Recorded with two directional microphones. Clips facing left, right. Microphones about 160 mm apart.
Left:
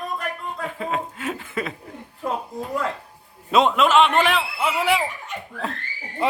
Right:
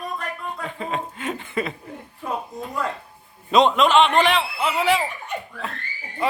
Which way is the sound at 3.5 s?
5° left (ahead or behind).